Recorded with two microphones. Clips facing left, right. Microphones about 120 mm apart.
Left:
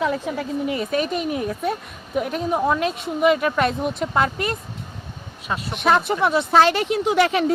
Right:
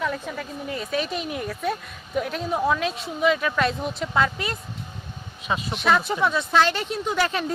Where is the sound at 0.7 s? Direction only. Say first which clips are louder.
Left 1 dB; 55° left (ahead or behind).